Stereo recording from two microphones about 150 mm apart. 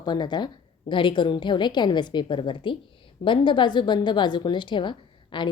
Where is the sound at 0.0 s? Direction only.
30° left (ahead or behind).